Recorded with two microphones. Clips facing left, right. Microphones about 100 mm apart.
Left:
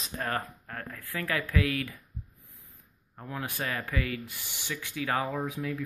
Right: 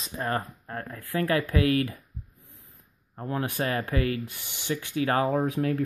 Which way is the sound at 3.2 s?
40° right (ahead or behind).